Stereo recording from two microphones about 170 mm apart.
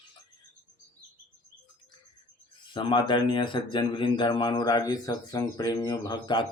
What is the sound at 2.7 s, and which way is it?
Speech, 30° left (ahead or behind).